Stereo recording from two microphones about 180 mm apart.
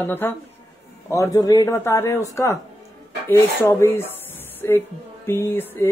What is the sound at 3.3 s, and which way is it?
Speech, 15° left (ahead or behind).